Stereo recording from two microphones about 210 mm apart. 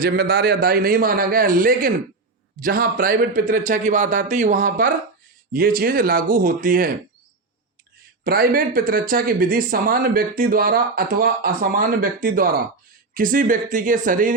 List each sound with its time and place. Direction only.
0.0 s a man's voice: 45° right (ahead or behind)
8.2 s a man's voice: 45° right (ahead or behind)